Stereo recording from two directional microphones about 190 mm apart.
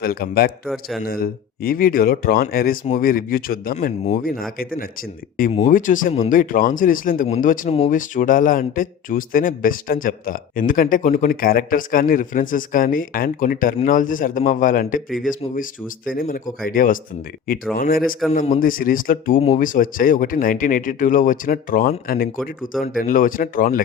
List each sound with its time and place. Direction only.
0.0 s speech: 50° left (ahead or behind)
18.3 s speech: 40° left (ahead or behind)